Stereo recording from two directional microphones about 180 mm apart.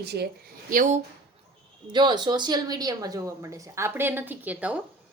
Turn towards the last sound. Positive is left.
turn(degrees=-10)  # may be behind; listen again after turning